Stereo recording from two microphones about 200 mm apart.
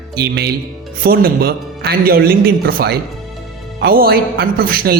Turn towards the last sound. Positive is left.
turn(degrees=-50)  # may be behind; listen again after turning